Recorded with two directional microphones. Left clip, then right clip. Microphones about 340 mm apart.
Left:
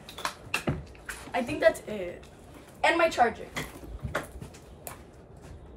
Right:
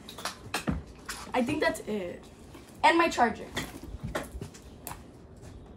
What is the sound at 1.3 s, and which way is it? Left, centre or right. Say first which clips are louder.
Speech: left 3 dB; centre.